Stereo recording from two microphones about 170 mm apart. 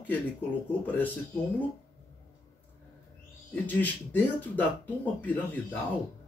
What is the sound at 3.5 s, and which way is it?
Speech, 10° left (ahead or behind).